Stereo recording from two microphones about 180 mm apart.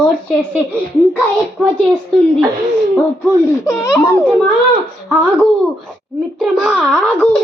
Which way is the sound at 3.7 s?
15° left (ahead or behind).